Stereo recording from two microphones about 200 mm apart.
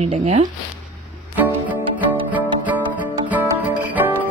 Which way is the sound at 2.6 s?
10° right (ahead or behind).